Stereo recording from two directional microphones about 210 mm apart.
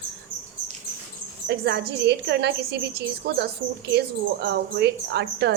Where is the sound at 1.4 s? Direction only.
50° right (ahead or behind).